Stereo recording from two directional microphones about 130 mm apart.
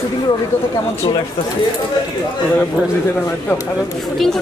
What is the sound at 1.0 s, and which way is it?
Speech, 35° left (ahead or behind).